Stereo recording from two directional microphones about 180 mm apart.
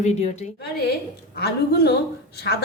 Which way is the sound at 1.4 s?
60° left (ahead or behind).